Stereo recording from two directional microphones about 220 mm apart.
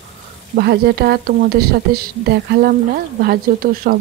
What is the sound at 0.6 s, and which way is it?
Speech, 45° right (ahead or behind).